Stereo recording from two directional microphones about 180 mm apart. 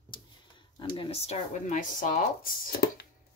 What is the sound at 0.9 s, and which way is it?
Speech, 30° left (ahead or behind).